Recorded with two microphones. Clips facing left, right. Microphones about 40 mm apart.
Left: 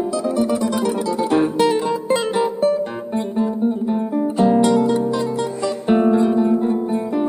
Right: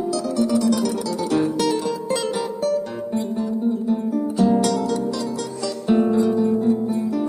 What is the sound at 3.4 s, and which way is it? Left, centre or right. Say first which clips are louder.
Guitar: left 5 dB; left.